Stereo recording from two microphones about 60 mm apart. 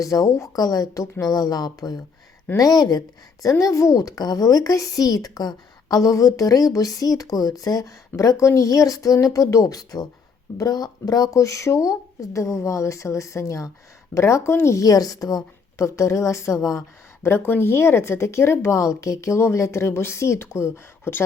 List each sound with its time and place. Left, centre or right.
0.0 s speech: left
3.6 s speech: left
14.8 s speech: left
15.8 s speech: left
17.2 s speech: left